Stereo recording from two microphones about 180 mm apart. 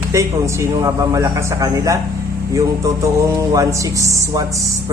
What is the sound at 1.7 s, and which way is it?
Speech, 20° right (ahead or behind).